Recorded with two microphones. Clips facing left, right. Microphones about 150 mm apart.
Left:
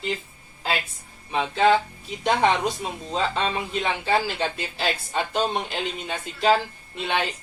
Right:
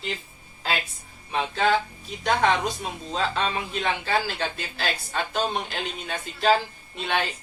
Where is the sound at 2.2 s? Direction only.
20° left (ahead or behind).